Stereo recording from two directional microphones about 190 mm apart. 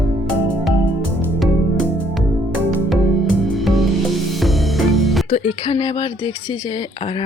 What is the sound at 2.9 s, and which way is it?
Music, centre (ahead or behind).